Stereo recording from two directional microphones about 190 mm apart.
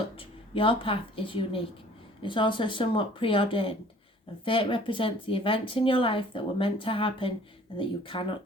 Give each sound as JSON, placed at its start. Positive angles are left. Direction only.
{"t": 0.2, "sound": "a woman's voice", "side_deg": 30}